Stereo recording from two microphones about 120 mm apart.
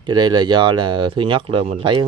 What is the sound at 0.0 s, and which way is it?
Speech, 40° right (ahead or behind).